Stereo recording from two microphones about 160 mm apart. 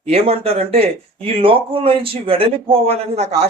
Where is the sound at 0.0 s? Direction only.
40° right (ahead or behind).